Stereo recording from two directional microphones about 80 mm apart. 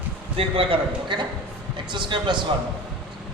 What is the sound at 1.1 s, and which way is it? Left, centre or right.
A man's voice, right.